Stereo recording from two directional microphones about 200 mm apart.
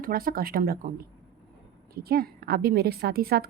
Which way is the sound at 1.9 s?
50° right (ahead or behind).